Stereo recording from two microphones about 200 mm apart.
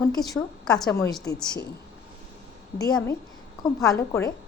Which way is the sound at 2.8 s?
20° left (ahead or behind).